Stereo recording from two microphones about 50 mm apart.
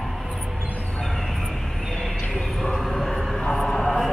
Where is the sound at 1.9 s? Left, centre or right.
Centre.